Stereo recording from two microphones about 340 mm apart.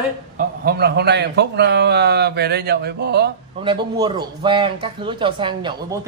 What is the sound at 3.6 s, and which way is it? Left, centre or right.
Speech, centre.